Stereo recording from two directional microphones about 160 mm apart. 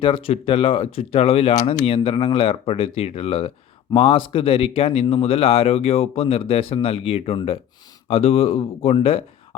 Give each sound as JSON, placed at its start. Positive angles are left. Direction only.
{"t": 0.0, "sound": "speech", "side_deg": 35}